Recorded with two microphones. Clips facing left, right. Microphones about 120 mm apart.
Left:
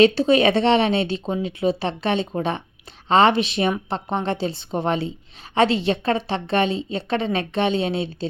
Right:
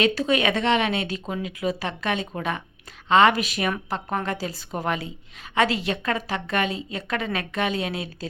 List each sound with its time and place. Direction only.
0.0 s a woman's voice: 30° left (ahead or behind)